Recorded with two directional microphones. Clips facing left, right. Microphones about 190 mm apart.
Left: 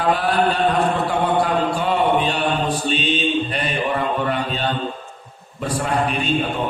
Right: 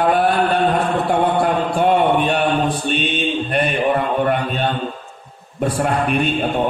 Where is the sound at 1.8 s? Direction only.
55° right (ahead or behind).